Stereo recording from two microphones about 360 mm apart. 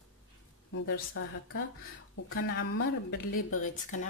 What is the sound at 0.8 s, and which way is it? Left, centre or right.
Speech, left.